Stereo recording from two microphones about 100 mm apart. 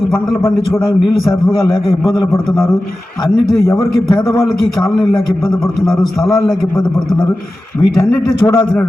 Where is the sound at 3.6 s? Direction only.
30° left (ahead or behind).